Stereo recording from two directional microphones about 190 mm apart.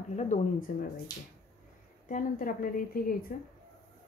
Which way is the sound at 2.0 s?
40° left (ahead or behind).